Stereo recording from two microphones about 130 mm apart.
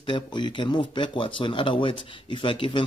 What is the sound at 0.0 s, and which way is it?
Speech, 35° left (ahead or behind).